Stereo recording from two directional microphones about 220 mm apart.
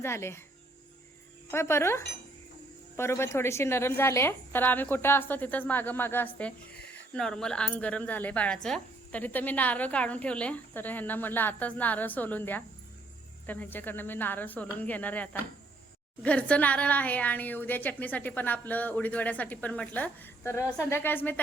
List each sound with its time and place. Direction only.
0.0 s speech: 10° left (ahead or behind)
1.5 s speech: 10° left (ahead or behind)